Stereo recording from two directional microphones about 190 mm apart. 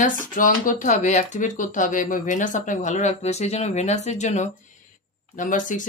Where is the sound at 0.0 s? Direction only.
45° left (ahead or behind).